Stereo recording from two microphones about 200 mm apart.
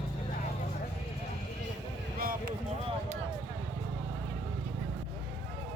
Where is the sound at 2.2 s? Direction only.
45° right (ahead or behind).